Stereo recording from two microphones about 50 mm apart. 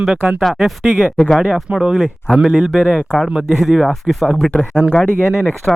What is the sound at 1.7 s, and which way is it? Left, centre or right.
Speech, centre.